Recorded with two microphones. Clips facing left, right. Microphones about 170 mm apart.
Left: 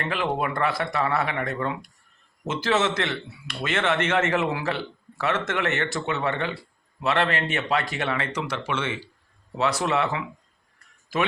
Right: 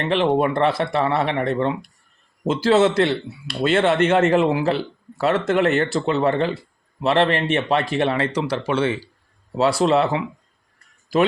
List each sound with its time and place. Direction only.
0.0 s speech: 30° right (ahead or behind)